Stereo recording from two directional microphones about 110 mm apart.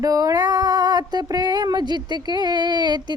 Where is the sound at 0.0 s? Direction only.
30° right (ahead or behind).